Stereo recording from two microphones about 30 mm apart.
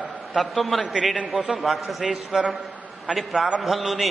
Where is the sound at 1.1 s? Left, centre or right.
Right.